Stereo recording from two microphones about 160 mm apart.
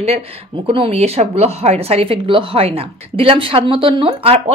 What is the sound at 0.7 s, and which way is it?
Speech, 35° right (ahead or behind).